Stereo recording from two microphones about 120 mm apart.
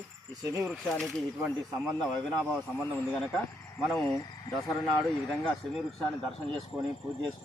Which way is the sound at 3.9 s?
25° left (ahead or behind).